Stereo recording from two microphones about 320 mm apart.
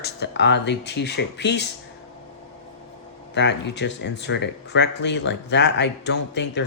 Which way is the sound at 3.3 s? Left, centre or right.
Left.